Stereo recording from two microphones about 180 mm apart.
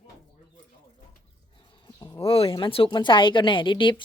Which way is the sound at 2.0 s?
20° left (ahead or behind).